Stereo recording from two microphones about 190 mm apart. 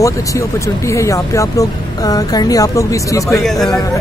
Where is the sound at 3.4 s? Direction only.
Centre (ahead or behind).